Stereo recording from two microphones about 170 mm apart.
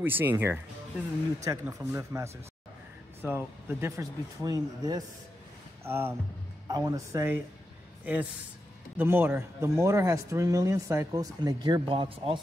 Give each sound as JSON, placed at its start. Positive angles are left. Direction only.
{"t": 0.0, "sound": "speech", "side_deg": -10}